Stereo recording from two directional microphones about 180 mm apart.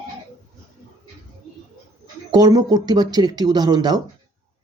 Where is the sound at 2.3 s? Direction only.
20° right (ahead or behind).